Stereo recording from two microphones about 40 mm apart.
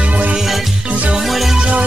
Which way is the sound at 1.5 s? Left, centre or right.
Right.